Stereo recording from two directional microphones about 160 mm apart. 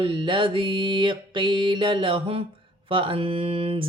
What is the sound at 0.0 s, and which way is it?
Mantra, 30° right (ahead or behind).